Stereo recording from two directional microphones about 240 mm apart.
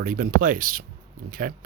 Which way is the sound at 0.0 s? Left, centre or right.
Right.